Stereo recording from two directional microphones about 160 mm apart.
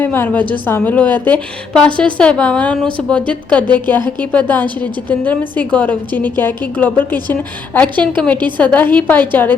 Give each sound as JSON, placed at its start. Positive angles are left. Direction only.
{"t": 0.0, "sound": "a woman's voice", "side_deg": 10}
{"t": 8.4, "sound": "a woman's voice", "side_deg": -30}
{"t": 8.6, "sound": "a woman's voice", "side_deg": 10}